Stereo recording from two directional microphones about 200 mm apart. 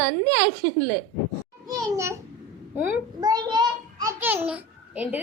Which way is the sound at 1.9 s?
15° right (ahead or behind).